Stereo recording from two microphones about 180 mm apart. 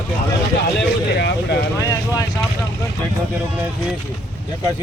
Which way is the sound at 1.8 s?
20° left (ahead or behind).